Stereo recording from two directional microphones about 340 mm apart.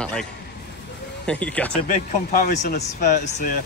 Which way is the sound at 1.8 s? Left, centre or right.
Left.